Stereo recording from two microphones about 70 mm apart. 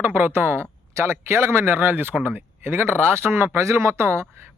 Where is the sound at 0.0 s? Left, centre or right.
Right.